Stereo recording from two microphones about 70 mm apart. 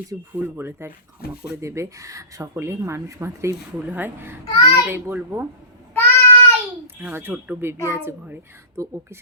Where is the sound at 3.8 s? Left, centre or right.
Right.